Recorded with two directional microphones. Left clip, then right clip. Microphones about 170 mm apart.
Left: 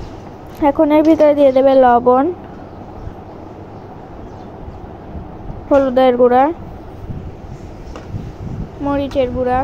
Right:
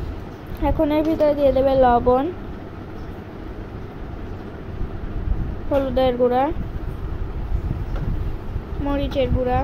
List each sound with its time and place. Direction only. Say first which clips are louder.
0.6 s speech: left 8 dB; 35° left (ahead or behind)
5.7 s speech: left 8 dB; 35° left (ahead or behind)
8.8 s speech: left 6 dB; 25° left (ahead or behind)